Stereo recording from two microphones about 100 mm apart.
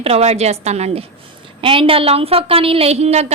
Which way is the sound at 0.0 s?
90° right.